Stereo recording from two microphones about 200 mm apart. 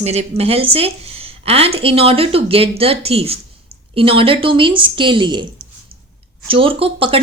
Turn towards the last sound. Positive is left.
turn(degrees=-25)  # may be behind; listen again after turning